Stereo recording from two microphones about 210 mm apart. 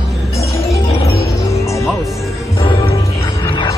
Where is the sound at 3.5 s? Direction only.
20° left (ahead or behind).